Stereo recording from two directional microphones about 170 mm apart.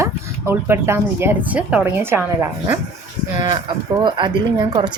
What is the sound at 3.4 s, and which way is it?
A woman's voice, 30° right (ahead or behind).